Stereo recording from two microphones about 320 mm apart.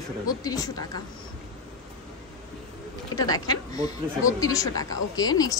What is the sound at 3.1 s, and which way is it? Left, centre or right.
A woman's voice, centre.